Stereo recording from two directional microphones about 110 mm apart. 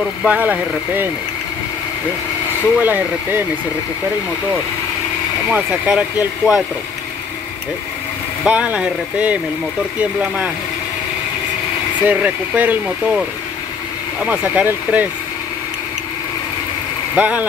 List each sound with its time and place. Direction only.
0.2 s speech: 15° right (ahead or behind)
2.8 s speech: 15° right (ahead or behind)
5.5 s speech: 10° right (ahead or behind)
8.5 s speech: 10° right (ahead or behind)
12.0 s speech: 15° right (ahead or behind)
14.2 s speech: 10° right (ahead or behind)
17.1 s speech: 15° right (ahead or behind)